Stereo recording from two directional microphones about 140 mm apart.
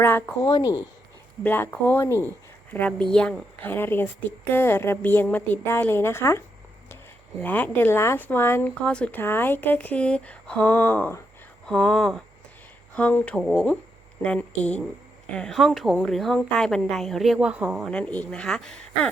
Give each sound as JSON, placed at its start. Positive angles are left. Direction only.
{"t": 0.0, "sound": "speech", "side_deg": 15}
{"t": 0.4, "sound": "speech", "side_deg": 25}
{"t": 1.5, "sound": "speech", "side_deg": 15}
{"t": 3.1, "sound": "speech", "side_deg": 5}
{"t": 7.4, "sound": "a woman's voice", "side_deg": 15}
{"t": 17.8, "sound": "speech", "side_deg": 5}